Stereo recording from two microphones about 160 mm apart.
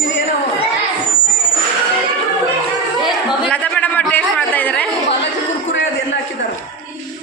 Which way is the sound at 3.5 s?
10° left (ahead or behind).